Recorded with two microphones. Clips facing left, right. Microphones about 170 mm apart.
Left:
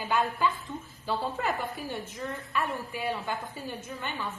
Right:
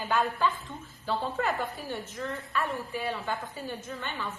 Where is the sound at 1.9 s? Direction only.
15° left (ahead or behind).